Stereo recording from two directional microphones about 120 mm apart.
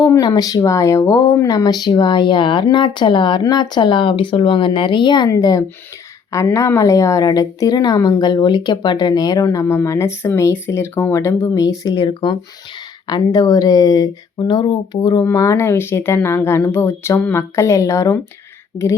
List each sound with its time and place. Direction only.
0.0 s a woman's voice: 35° left (ahead or behind)